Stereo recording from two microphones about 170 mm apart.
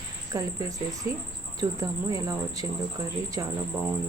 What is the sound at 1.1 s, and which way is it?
Speech, 15° right (ahead or behind).